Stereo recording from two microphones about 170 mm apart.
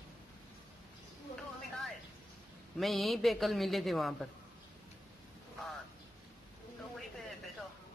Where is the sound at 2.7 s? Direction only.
Centre (ahead or behind).